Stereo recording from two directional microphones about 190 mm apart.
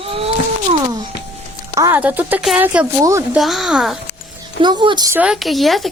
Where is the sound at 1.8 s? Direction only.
10° right (ahead or behind).